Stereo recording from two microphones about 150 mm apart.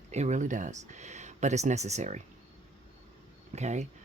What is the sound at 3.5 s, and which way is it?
Speech, 50° right (ahead or behind).